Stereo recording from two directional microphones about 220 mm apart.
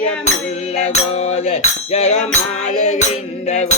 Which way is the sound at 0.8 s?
30° left (ahead or behind).